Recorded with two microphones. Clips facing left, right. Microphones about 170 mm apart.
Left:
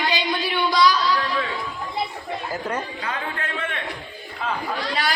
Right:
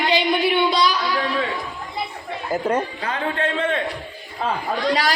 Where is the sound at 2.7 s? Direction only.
30° right (ahead or behind).